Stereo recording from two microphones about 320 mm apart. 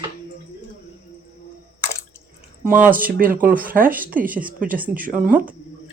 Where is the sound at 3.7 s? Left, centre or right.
Centre.